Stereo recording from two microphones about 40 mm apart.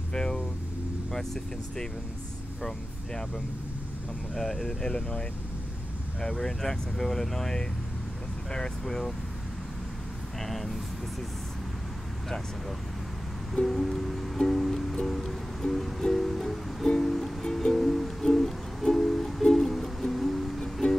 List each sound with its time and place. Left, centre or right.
0.1 s vehicle: centre
1.1 s speech: centre
4.4 s speech: centre
4.8 s speech: left
6.3 s speech: centre
10.4 s speech: centre
13.6 s music: centre